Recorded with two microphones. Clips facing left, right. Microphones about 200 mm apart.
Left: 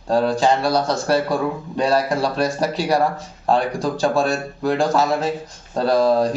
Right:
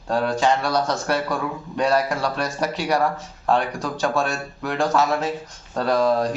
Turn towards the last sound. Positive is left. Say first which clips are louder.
# left 3 dB
turn(degrees=35)  # may be behind; listen again after turning